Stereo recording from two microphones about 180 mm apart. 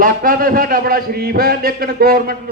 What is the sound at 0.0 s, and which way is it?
A man's voice, 55° right (ahead or behind).